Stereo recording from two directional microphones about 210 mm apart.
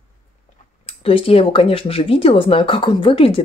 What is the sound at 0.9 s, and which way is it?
Speech, 25° left (ahead or behind).